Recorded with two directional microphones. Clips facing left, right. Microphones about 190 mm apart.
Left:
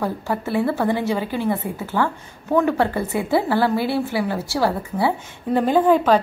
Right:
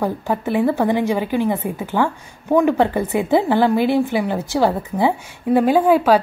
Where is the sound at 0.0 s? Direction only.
20° right (ahead or behind).